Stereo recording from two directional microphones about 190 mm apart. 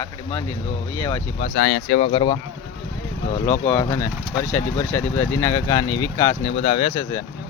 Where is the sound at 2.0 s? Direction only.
25° left (ahead or behind).